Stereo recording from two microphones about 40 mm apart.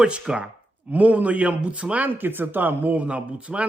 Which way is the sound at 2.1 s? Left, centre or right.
Right.